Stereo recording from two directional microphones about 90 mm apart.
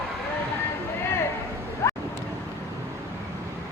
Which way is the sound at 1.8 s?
35° left (ahead or behind).